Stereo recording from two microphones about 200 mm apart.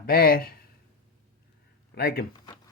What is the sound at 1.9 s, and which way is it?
Speech, 50° left (ahead or behind).